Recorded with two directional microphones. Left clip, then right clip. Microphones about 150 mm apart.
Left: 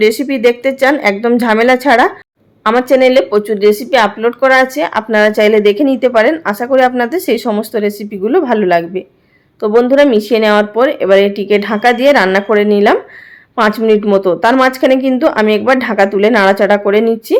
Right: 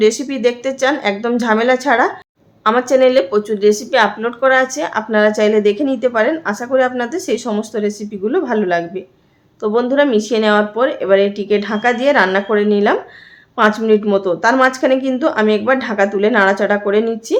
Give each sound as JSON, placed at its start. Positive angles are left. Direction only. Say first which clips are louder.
{"t": 0.0, "sound": "speech", "louder": "left 4 dB", "side_deg": 30}